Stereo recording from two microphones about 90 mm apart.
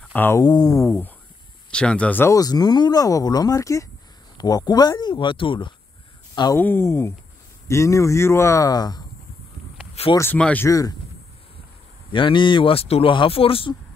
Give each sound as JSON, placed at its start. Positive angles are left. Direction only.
{"t": 0.1, "sound": "speech", "side_deg": 20}
{"t": 0.4, "sound": "speech", "side_deg": 45}
{"t": 0.8, "sound": "speech", "side_deg": 25}
{"t": 1.7, "sound": "speech", "side_deg": 10}
{"t": 2.2, "sound": "speech", "side_deg": 45}
{"t": 5.1, "sound": "speech", "side_deg": 70}
{"t": 6.6, "sound": "a man's voice", "side_deg": 25}
{"t": 10.3, "sound": "speech", "side_deg": 15}
{"t": 10.7, "sound": "a man's voice", "side_deg": 40}
{"t": 12.1, "sound": "speech", "side_deg": 65}